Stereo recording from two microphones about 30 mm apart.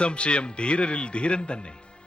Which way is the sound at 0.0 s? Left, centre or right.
Left.